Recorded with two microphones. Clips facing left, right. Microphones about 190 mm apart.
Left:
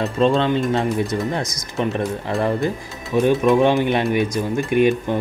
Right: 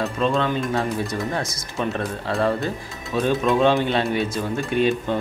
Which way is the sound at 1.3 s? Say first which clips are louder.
Left 2 dB; 20° left (ahead or behind).